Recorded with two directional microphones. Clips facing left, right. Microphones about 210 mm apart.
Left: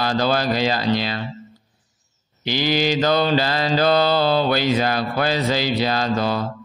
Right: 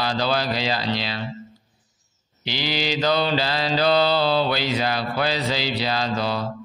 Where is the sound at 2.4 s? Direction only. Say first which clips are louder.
Left 6 dB; 50° left (ahead or behind).